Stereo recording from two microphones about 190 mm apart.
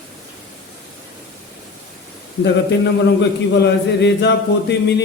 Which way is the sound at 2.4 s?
70° left (ahead or behind).